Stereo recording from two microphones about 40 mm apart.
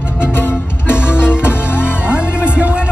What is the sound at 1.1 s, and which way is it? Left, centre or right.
Music, left.